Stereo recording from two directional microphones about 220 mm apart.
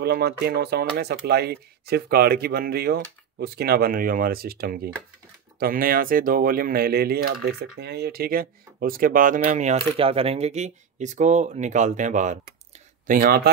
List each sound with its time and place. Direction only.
0.0 s speech: 45° right (ahead or behind)